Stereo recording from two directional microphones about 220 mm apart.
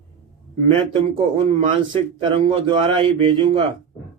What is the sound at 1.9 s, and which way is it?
Speech, 20° right (ahead or behind).